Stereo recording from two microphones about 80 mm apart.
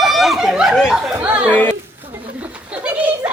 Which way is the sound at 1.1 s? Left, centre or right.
Centre.